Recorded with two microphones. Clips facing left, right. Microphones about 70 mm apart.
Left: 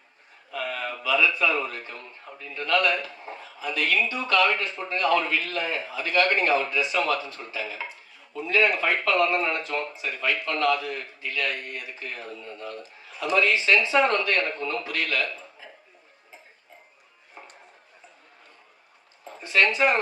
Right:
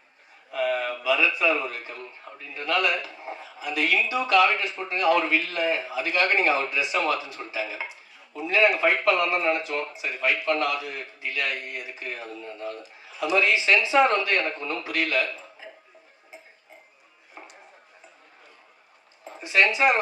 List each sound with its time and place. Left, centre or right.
0.5 s a sound: right
1.0 s a man's voice: centre
19.4 s speech: centre